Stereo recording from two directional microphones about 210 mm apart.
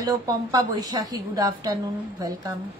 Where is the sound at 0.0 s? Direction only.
20° right (ahead or behind).